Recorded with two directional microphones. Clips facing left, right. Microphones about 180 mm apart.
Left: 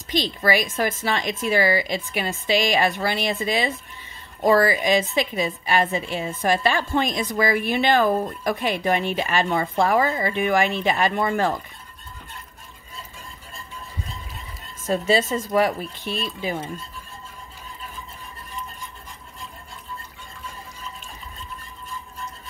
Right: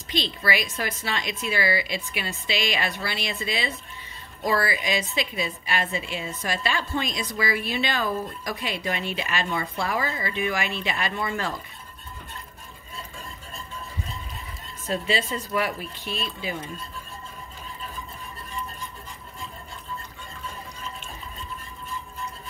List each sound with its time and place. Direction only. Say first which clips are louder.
0.1 s a woman's voice: left 5 dB; 45° left (ahead or behind)
14.9 s a woman's voice: left 6 dB; 45° left (ahead or behind)